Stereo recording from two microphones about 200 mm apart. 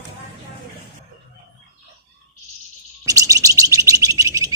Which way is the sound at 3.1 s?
15° right (ahead or behind).